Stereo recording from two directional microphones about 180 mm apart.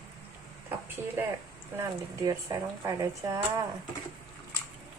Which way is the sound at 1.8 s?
20° right (ahead or behind).